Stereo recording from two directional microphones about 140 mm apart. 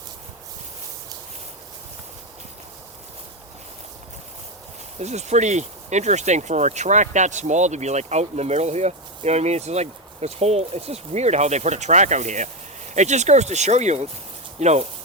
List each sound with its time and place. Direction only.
4.9 s speech: 55° right (ahead or behind)